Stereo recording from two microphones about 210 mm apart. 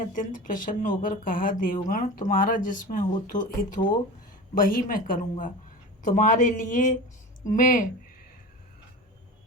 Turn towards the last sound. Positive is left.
turn(degrees=40)  # may be behind; listen again after turning